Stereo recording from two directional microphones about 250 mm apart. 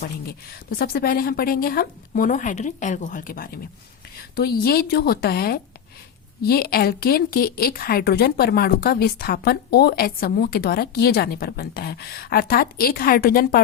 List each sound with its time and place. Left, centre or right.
0.0 s a woman's voice: left